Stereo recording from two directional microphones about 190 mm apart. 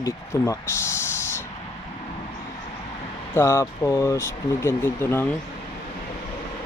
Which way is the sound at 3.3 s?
15° left (ahead or behind).